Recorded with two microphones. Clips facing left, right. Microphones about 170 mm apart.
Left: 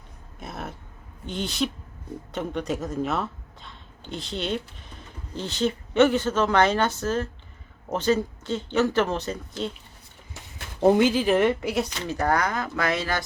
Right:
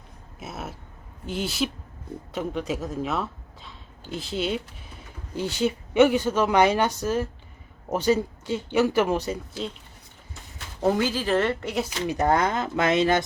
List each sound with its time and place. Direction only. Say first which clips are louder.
0.3 s speech: even; 5° right (ahead or behind)
10.8 s a woman's voice: left 5 dB; 20° left (ahead or behind)
12.0 s speech: right 4 dB; 20° right (ahead or behind)